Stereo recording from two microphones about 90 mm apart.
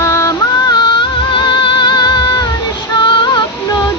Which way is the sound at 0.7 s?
60° left (ahead or behind).